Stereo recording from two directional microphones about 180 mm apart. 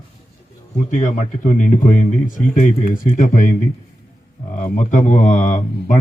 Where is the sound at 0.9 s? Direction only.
40° left (ahead or behind).